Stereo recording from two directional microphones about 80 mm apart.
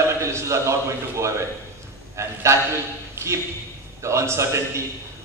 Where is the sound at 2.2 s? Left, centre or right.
Right.